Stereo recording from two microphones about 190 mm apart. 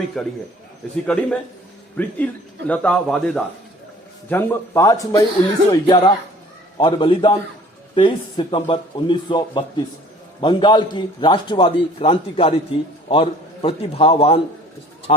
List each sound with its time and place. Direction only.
0.2 s a man's voice: 5° left (ahead or behind); by 14.4 s 30° left (ahead or behind)